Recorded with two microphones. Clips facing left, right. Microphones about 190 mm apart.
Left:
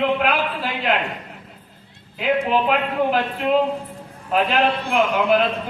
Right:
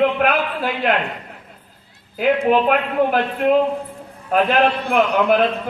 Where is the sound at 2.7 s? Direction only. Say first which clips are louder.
Right 2 dB; 50° right (ahead or behind).